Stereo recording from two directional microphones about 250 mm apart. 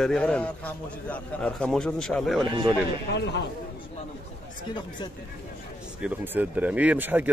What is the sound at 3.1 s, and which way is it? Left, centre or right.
Speech, left.